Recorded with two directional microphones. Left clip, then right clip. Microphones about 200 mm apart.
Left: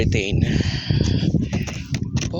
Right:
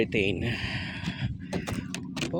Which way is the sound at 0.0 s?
Centre (ahead or behind).